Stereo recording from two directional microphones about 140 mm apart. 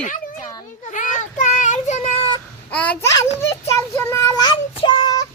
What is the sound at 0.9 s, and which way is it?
Child singing, 65° left (ahead or behind).